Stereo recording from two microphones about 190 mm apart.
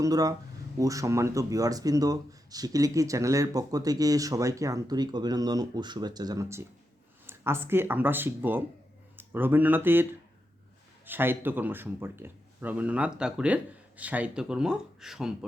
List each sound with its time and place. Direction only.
0.0 s speech: 20° right (ahead or behind); by 15.4 s centre (ahead or behind)